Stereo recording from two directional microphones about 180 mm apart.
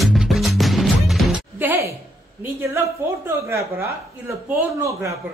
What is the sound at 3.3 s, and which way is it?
Speech, 15° right (ahead or behind).